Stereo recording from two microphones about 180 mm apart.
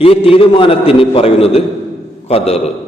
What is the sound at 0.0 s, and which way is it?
A man's voice, 30° left (ahead or behind).